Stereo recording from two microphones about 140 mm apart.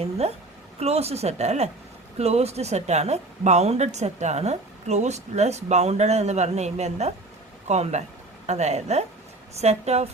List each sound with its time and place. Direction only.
0.2 s a woman's voice: 50° right (ahead or behind)